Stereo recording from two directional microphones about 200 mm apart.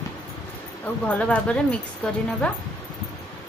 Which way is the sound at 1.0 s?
5° left (ahead or behind).